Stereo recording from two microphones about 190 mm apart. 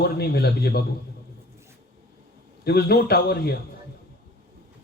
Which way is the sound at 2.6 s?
60° left (ahead or behind).